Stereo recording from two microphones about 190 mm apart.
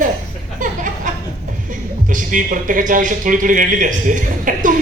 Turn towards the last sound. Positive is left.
turn(degrees=-45)  # may be behind; listen again after turning